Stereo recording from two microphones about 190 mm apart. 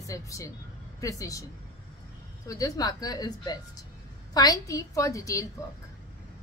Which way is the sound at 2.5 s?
20° left (ahead or behind).